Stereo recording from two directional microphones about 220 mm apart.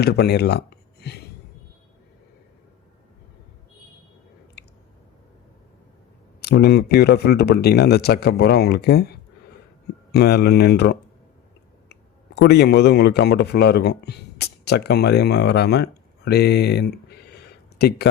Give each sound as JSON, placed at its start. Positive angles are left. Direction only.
{"t": 0.0, "sound": "speech", "side_deg": 50}
{"t": 6.4, "sound": "speech", "side_deg": 45}